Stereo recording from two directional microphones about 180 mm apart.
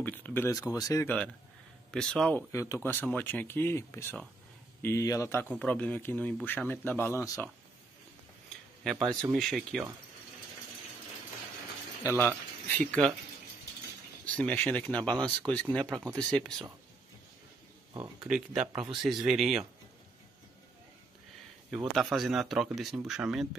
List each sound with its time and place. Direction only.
0.0 s speech: 10° left (ahead or behind)
1.9 s speech: 5° left (ahead or behind)
2.5 s speech: 15° left (ahead or behind)
8.9 s speech: 25° right (ahead or behind)
9.3 s speech: centre (ahead or behind)
12.0 s speech: 15° left (ahead or behind)
14.2 s speech: 5° left (ahead or behind)
15.8 s speech: 15° right (ahead or behind)
16.2 s speech: 5° left (ahead or behind)
18.2 s speech: 5° right (ahead or behind)
21.6 s speech: centre (ahead or behind)